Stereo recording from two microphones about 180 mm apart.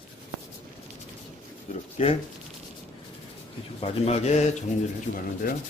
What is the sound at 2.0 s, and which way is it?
Speech, 35° left (ahead or behind).